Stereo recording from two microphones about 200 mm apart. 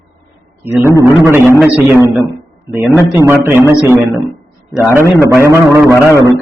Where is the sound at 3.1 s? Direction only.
10° right (ahead or behind).